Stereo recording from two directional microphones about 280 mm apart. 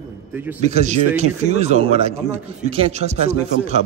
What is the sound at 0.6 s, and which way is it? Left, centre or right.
A man's voice, right.